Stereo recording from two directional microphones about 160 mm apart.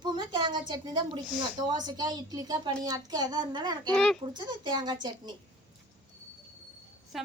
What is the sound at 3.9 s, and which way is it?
Speech, 5° left (ahead or behind).